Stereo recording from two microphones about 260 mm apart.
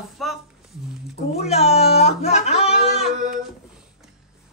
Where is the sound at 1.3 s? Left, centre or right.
Left.